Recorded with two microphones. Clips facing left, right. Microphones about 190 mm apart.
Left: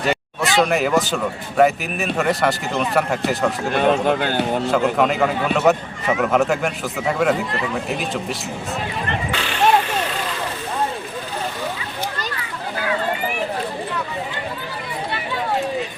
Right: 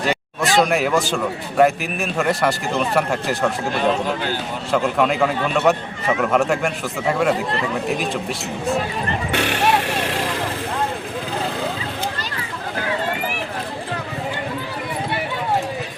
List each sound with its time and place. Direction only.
0.5 s a man's voice: centre (ahead or behind)
4.2 s a man's voice: 60° left (ahead or behind)
4.7 s a man's voice: centre (ahead or behind)
9.3 s vehicle: 65° right (ahead or behind)